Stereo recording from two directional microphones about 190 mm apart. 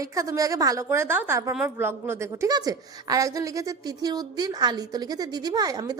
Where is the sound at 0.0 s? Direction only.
15° right (ahead or behind).